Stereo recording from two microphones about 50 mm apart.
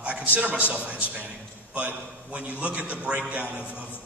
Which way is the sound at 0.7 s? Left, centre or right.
Right.